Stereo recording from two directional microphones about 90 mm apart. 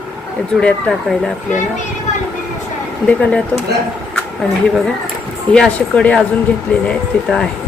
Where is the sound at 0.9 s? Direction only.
5° left (ahead or behind).